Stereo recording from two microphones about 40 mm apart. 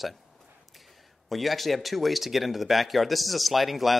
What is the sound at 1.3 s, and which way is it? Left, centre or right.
Speech, centre.